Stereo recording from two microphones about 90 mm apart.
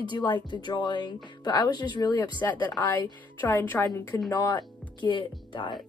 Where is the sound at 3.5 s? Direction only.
25° left (ahead or behind).